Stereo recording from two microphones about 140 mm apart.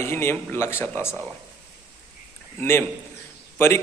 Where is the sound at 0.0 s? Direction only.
20° left (ahead or behind).